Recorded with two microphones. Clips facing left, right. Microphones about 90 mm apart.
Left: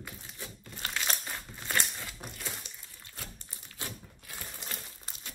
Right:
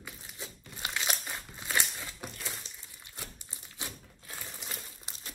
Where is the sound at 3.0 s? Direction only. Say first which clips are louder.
Even; 15° right (ahead or behind).